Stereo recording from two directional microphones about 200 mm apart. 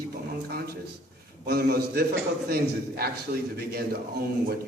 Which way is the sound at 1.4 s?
55° right (ahead or behind).